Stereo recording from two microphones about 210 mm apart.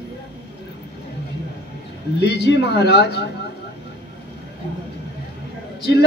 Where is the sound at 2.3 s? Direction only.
55° left (ahead or behind).